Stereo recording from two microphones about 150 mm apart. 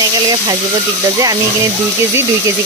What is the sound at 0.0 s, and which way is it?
Speech, 25° right (ahead or behind).